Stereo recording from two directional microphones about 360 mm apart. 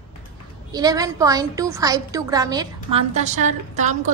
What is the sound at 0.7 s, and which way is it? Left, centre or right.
A woman's voice, centre.